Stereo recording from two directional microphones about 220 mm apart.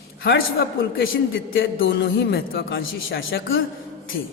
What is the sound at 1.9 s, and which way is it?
A man's voice, 50° left (ahead or behind).